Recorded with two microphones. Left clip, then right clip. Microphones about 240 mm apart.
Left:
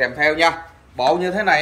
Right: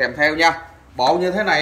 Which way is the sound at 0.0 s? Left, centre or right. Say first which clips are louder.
Even; centre.